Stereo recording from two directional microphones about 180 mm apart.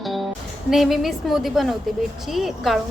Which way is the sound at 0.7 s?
Centre (ahead or behind).